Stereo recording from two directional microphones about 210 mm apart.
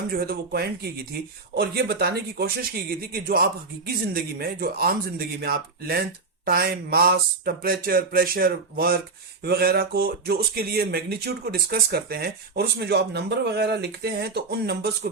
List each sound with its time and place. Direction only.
0.1 s speech: 45° right (ahead or behind)